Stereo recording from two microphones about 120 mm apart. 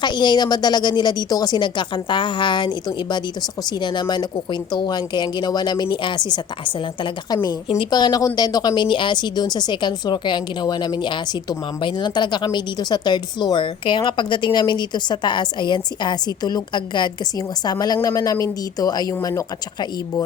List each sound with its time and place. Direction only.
0.0 s speech: 40° left (ahead or behind)
7.8 s speech: 35° left (ahead or behind)